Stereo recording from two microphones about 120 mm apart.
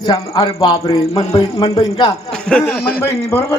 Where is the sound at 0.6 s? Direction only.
30° left (ahead or behind).